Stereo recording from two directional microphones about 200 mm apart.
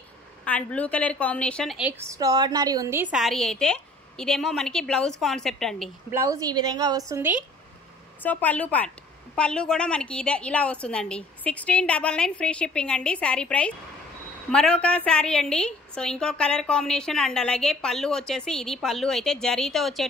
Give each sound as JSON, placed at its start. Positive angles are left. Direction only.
{"t": 0.5, "sound": "a woman's voice", "side_deg": 5}
{"t": 2.1, "sound": "a woman's voice", "side_deg": -20}
{"t": 6.1, "sound": "a woman's voice", "side_deg": -15}
{"t": 8.2, "sound": "a woman's voice", "side_deg": 10}